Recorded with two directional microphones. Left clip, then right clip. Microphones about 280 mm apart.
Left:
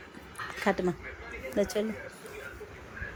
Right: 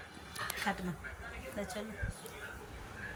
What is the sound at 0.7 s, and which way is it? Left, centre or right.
Speech, centre.